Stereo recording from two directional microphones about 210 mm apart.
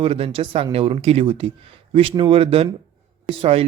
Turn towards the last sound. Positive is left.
turn(degrees=-25)  # may be behind; listen again after turning